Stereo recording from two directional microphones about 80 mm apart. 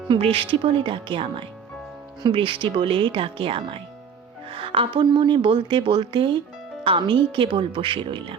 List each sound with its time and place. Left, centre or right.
0.1 s speech: right